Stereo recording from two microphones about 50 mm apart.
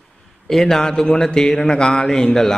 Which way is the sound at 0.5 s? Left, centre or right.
Centre.